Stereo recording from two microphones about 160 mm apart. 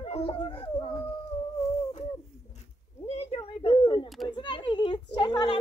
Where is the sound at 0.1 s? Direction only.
35° left (ahead or behind).